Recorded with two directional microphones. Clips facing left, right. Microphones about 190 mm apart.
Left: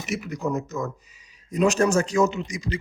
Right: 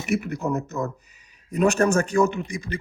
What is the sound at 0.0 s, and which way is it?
Speech, 60° right (ahead or behind).